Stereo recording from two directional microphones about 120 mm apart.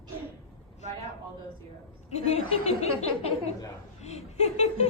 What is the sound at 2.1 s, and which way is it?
A woman's voice, 65° left (ahead or behind).